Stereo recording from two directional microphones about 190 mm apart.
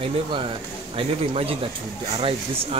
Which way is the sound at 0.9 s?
30° right (ahead or behind).